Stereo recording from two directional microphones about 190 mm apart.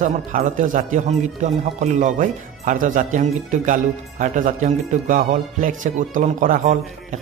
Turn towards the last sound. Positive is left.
turn(degrees=-45)  # may be behind; listen again after turning